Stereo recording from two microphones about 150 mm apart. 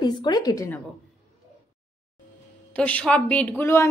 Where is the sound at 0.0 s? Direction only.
30° left (ahead or behind).